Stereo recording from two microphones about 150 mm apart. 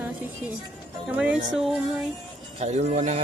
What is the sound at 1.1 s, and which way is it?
Music, 5° right (ahead or behind).